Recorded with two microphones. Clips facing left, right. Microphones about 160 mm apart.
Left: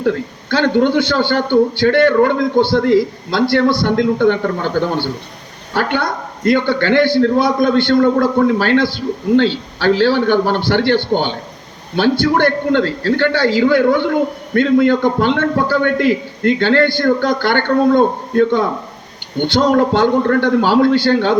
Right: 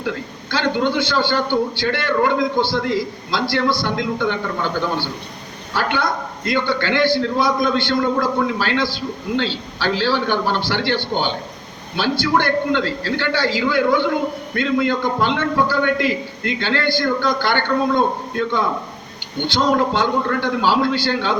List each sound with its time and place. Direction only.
0.0 s a man's voice: 50° left (ahead or behind)